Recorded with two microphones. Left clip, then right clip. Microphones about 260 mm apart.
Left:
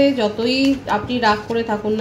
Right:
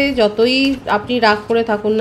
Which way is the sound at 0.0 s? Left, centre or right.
Right.